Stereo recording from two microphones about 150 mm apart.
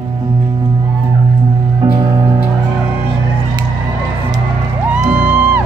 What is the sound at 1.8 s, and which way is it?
Music, 25° right (ahead or behind).